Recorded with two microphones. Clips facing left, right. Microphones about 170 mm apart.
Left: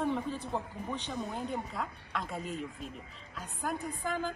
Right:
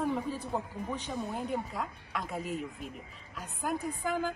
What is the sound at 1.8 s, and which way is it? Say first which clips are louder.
Music: right 1 dB; 5° right (ahead or behind).